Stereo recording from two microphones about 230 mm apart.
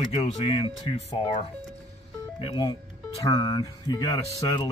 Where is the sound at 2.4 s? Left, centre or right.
Centre.